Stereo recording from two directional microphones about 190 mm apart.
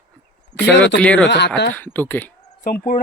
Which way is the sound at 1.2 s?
65° left (ahead or behind).